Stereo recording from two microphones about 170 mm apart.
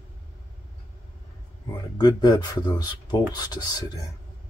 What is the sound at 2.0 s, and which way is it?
Speech, 25° left (ahead or behind).